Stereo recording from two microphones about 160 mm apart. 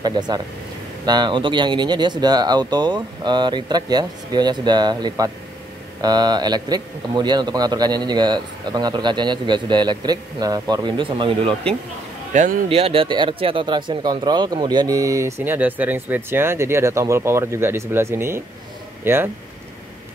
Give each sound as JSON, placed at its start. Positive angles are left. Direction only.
{"t": 0.0, "sound": "a man's voice", "side_deg": -25}
{"t": 12.3, "sound": "speech", "side_deg": -50}
{"t": 12.6, "sound": "speech", "side_deg": -35}